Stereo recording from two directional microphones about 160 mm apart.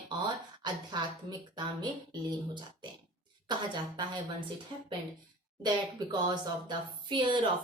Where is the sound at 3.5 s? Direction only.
30° right (ahead or behind).